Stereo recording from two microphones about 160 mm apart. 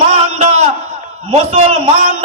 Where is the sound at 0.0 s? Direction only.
45° right (ahead or behind).